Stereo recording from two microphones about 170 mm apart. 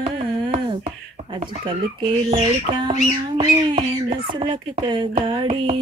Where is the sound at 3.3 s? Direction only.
35° right (ahead or behind).